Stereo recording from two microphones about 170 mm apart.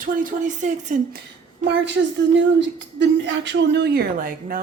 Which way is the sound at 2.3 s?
90° right.